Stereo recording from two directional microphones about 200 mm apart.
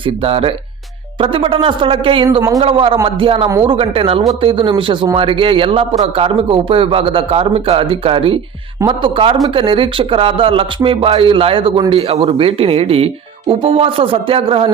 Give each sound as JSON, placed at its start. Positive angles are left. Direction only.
{"t": 0.0, "sound": "a man's voice", "side_deg": -25}
{"t": 3.5, "sound": "speech", "side_deg": -15}
{"t": 3.8, "sound": "a man's voice", "side_deg": -30}